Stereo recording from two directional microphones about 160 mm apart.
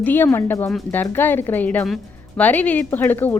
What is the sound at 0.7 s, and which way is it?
Speech, 5° left (ahead or behind).